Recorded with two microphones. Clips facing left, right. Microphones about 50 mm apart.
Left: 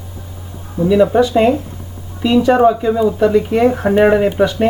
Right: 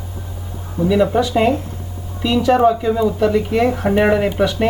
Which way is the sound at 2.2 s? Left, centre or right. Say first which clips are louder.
Left 3 dB; centre.